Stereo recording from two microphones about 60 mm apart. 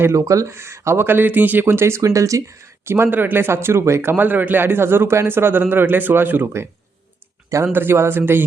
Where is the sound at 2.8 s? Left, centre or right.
Right.